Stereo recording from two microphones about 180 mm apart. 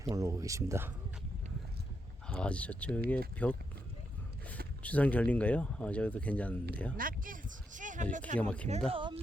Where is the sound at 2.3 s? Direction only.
5° left (ahead or behind).